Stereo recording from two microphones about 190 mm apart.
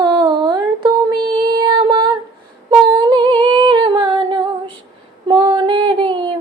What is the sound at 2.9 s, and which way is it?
Humming, 25° right (ahead or behind).